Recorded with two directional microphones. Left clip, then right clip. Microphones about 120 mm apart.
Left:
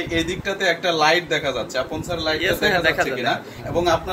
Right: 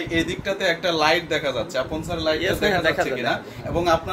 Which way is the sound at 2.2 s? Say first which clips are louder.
Left 1 dB; 50° right (ahead or behind).